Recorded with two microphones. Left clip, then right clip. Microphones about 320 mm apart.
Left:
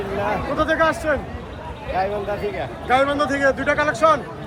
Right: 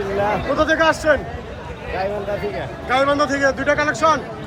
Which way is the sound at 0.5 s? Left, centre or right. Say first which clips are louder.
Right 2 dB; centre.